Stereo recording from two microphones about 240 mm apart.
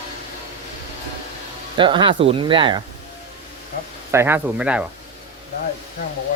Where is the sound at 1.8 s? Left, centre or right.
Centre.